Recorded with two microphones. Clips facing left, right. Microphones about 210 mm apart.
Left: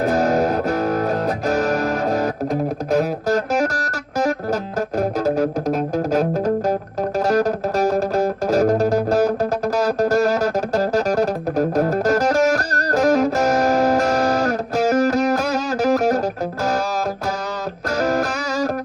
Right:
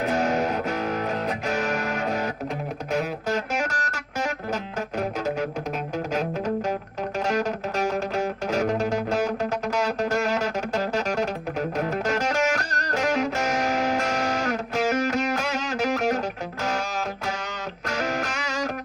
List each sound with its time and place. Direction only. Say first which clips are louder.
0.0 s music: left 6 dB; 40° left (ahead or behind)
17.9 s music: left 8 dB; 40° left (ahead or behind)